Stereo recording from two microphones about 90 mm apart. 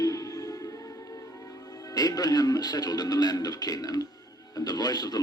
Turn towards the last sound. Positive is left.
turn(degrees=45)  # may be behind; listen again after turning